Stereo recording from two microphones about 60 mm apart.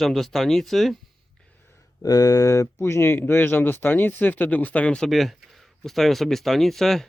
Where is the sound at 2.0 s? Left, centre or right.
Left.